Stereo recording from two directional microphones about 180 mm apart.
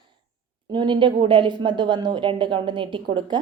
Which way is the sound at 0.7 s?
25° right (ahead or behind).